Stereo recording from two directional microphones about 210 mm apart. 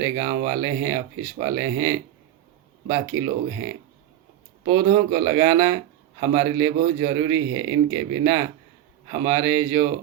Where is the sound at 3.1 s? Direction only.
80° right.